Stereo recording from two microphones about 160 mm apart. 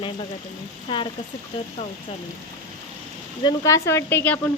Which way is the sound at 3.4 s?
20° left (ahead or behind).